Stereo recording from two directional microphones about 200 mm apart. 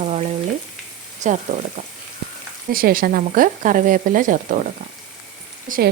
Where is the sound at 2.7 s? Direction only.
45° right (ahead or behind).